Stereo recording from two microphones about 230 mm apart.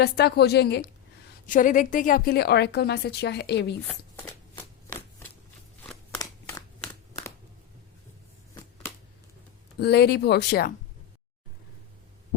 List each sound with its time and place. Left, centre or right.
0.0 s a woman's voice: left
1.5 s a woman's voice: left
4.3 s shuffling cards: centre
5.8 s a sound: centre
9.7 s a woman's voice: left